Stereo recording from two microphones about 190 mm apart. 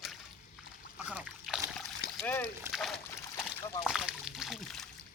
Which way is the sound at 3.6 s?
20° left (ahead or behind).